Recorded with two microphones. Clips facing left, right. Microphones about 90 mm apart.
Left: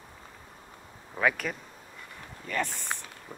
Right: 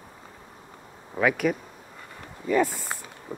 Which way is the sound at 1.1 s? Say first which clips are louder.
Right 5 dB; 5° right (ahead or behind).